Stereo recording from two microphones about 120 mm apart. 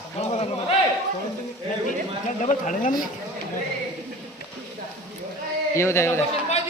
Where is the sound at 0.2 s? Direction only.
60° left (ahead or behind).